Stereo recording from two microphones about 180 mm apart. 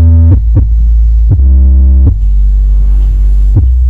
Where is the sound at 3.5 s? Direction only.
20° right (ahead or behind).